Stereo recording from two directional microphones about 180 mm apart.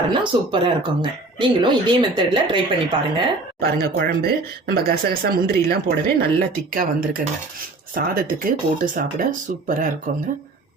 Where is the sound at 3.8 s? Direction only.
55° right (ahead or behind).